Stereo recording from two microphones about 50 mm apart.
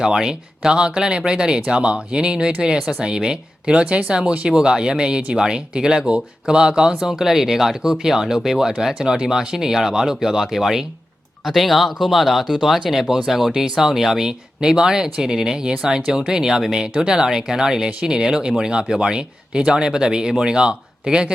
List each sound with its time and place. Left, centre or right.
0.0 s speech: centre